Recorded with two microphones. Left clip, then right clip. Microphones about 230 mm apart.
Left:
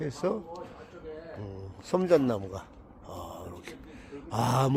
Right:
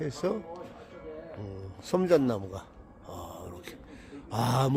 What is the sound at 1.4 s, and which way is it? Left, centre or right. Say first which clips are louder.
Speech: even; centre.